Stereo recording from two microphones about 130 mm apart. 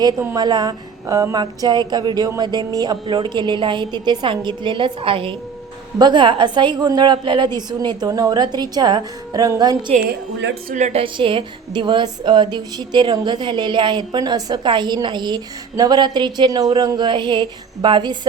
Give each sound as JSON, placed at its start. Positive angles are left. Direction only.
{"t": 0.3, "sound": "a woman's voice", "side_deg": -30}
{"t": 10.7, "sound": "a woman's voice", "side_deg": -70}
{"t": 10.9, "sound": "a woman's voice", "side_deg": -40}